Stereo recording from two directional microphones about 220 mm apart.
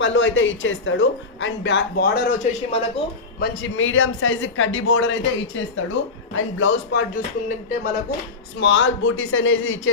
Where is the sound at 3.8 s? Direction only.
65° left (ahead or behind).